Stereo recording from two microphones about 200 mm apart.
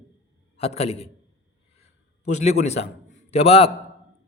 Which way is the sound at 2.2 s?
35° left (ahead or behind).